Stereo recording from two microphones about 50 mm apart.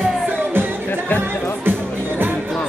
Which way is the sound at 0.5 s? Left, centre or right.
Right.